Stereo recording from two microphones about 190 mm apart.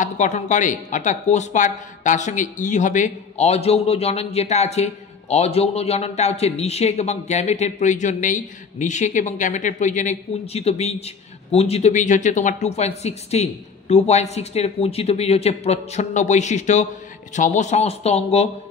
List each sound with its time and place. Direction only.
0.0 s speech: 40° left (ahead or behind)